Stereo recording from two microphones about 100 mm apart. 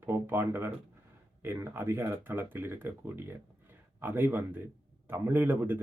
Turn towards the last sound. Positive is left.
turn(degrees=-20)  # may be behind; listen again after turning